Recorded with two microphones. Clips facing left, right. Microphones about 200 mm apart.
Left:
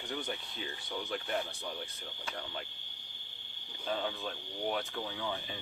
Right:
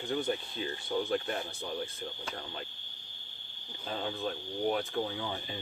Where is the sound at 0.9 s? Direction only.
40° right (ahead or behind).